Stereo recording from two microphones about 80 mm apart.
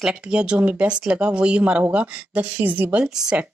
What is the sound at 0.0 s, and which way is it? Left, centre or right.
Speech, centre.